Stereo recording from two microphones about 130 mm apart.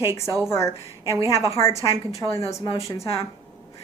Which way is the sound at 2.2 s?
25° left (ahead or behind).